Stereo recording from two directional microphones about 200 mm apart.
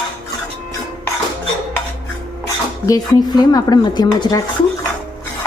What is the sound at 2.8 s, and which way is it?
Speech, 20° left (ahead or behind).